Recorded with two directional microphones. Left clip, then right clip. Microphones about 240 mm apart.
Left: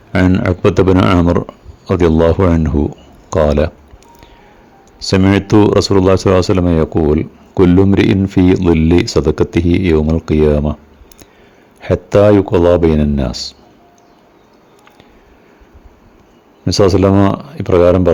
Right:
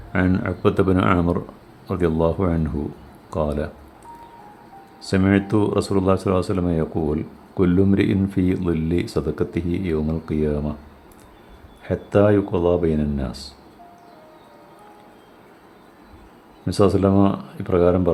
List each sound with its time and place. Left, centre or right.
0.3 s speech: left
4.9 s speech: left
11.8 s speech: left
16.6 s speech: left